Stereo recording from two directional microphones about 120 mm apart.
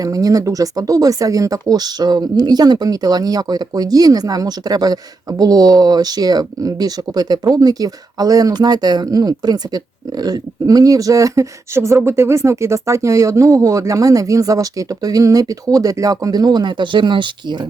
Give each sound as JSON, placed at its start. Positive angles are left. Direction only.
{"t": 0.0, "sound": "speech", "side_deg": -30}